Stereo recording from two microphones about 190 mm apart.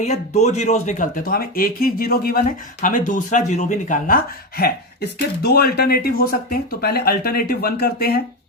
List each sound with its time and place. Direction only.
0.0 s speech: 35° left (ahead or behind); by 8.2 s 55° left (ahead or behind)